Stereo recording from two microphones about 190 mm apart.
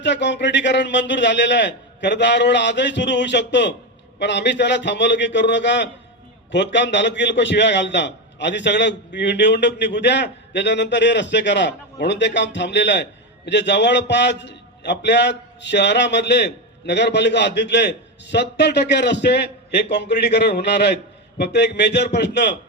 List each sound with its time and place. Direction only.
0.0 s a man's voice: 65° left (ahead or behind)